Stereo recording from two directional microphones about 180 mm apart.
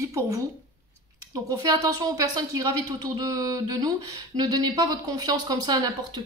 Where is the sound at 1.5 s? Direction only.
20° right (ahead or behind).